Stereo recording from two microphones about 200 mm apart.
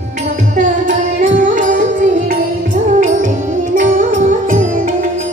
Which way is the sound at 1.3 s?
40° right (ahead or behind).